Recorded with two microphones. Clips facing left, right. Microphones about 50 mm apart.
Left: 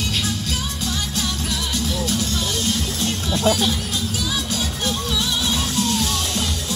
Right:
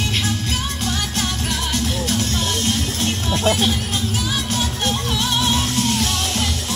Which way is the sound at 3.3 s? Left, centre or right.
Right.